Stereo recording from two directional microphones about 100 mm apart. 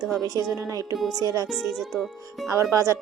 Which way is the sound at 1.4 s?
5° right (ahead or behind).